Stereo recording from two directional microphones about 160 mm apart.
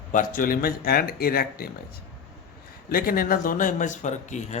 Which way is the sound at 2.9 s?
65° left (ahead or behind).